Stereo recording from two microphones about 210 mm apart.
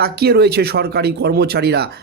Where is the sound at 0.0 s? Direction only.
50° right (ahead or behind).